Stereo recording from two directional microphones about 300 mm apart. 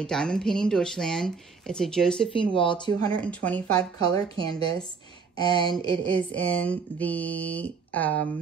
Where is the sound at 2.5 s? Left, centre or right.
Centre.